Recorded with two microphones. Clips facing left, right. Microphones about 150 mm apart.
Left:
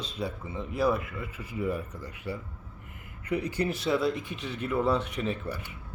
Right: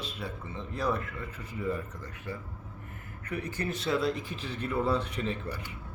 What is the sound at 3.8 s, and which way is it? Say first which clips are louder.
Speech: even; centre (ahead or behind).